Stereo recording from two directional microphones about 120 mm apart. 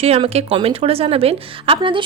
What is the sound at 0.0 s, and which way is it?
A woman's voice, 55° right (ahead or behind).